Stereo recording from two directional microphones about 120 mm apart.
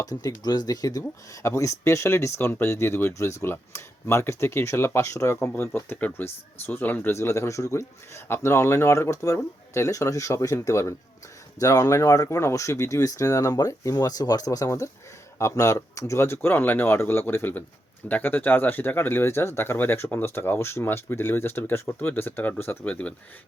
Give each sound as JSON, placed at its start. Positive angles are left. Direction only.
{"t": 0.0, "sound": "speech", "side_deg": 30}